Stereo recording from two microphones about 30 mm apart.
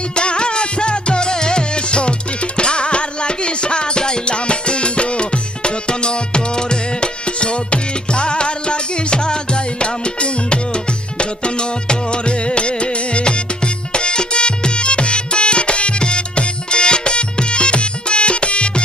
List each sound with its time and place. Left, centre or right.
0.2 s music: left